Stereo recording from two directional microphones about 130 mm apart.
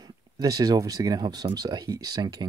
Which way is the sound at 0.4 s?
25° right (ahead or behind).